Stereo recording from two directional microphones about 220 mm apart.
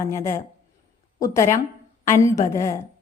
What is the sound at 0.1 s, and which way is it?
A woman's voice, 15° left (ahead or behind).